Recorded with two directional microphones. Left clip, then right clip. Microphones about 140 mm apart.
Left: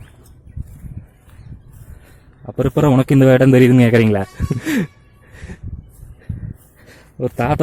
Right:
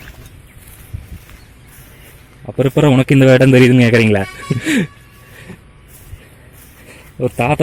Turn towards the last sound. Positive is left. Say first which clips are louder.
# right 3 dB
turn(degrees=35)  # may be behind; listen again after turning